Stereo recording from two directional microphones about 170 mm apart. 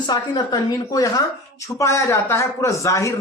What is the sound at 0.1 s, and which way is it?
Speech, 25° left (ahead or behind).